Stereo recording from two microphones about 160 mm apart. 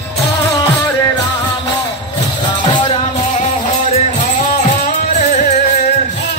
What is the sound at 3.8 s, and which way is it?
Music, 50° left (ahead or behind).